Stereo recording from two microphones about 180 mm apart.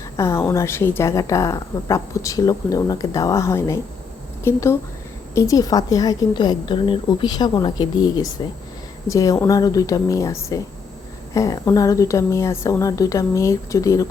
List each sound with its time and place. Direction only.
0.2 s a woman's voice: 15° left (ahead or behind)